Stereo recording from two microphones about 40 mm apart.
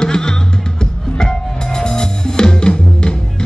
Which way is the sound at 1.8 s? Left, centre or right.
Centre.